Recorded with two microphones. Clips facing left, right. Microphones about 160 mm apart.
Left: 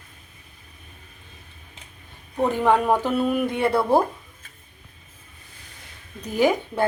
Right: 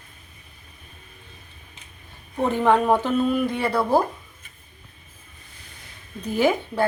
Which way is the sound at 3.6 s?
25° left (ahead or behind).